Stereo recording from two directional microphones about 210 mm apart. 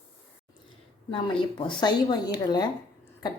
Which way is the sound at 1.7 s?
20° left (ahead or behind).